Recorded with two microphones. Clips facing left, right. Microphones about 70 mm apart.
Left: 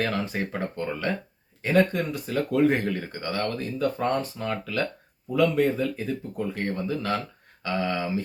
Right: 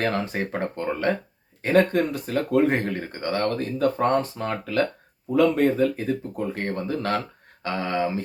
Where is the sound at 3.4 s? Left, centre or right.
Right.